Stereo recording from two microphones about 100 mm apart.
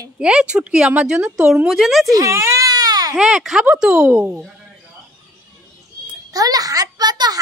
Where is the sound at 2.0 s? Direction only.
30° right (ahead or behind).